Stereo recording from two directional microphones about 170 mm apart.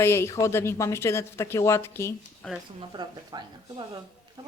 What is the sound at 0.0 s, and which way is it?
Speech, 15° left (ahead or behind).